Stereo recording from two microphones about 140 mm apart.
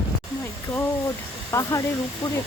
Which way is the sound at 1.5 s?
20° left (ahead or behind).